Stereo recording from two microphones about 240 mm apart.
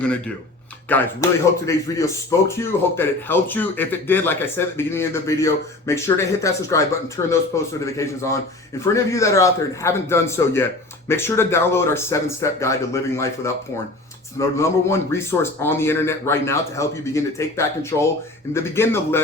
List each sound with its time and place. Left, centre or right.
0.9 s speech: centre